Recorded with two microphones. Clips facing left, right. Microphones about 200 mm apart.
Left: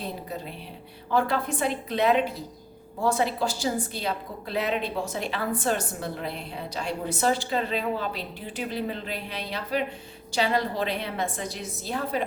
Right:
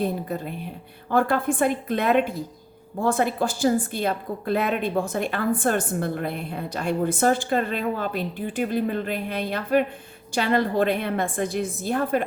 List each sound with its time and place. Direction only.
0.0 s a woman's voice: 50° right (ahead or behind)